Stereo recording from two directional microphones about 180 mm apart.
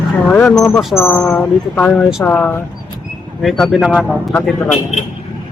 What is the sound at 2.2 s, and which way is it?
Speech, 10° left (ahead or behind).